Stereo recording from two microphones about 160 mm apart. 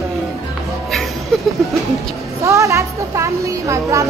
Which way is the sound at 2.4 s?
20° right (ahead or behind).